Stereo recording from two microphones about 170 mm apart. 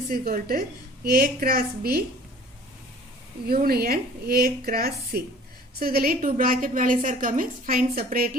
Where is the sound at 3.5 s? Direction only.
60° right (ahead or behind).